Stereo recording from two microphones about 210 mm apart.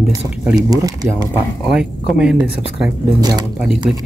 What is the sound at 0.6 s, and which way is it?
Speech, 20° right (ahead or behind).